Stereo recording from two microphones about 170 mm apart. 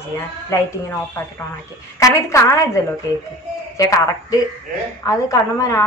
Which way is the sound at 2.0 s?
20° left (ahead or behind).